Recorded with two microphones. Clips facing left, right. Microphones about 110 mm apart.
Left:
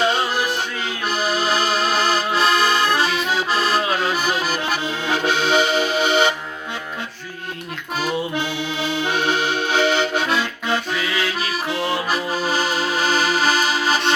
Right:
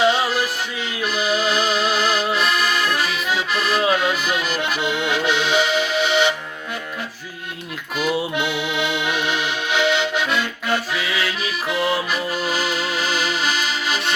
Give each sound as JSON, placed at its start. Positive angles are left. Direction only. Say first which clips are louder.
{"t": 0.0, "sound": "music", "louder": "right 2 dB", "side_deg": 0}
{"t": 1.0, "sound": "accordion", "louder": "right 1 dB", "side_deg": 40}
{"t": 7.9, "sound": "accordion", "louder": "right 1 dB", "side_deg": 35}
{"t": 10.9, "sound": "music", "louder": "left 1 dB", "side_deg": 0}
{"t": 12.1, "sound": "music", "louder": "left 2 dB", "side_deg": 35}